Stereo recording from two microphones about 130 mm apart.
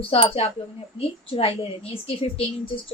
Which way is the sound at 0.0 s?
45° left (ahead or behind).